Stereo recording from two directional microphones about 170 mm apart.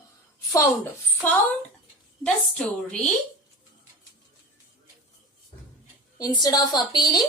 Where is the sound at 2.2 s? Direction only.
5° left (ahead or behind).